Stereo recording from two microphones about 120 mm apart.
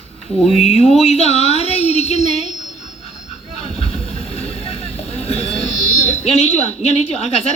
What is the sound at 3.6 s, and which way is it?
Speech, 55° left (ahead or behind).